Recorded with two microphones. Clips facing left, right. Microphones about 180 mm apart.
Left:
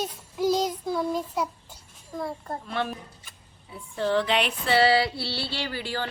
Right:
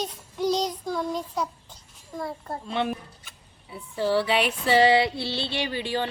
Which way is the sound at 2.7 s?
20° right (ahead or behind).